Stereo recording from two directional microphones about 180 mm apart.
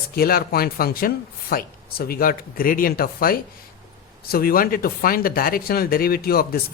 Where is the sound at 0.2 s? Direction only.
55° left (ahead or behind).